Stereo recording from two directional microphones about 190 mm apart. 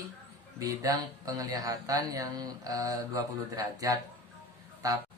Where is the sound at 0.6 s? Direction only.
20° right (ahead or behind).